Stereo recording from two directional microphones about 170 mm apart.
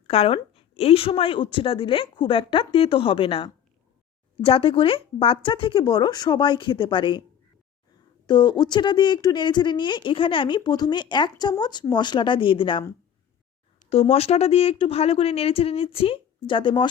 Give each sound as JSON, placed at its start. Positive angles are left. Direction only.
{"t": 0.1, "sound": "a woman's voice", "side_deg": 35}
{"t": 8.3, "sound": "speech", "side_deg": 25}
{"t": 13.9, "sound": "a woman's voice", "side_deg": 35}